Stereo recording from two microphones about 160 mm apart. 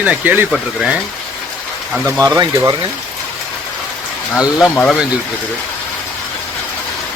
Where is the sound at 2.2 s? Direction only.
20° right (ahead or behind).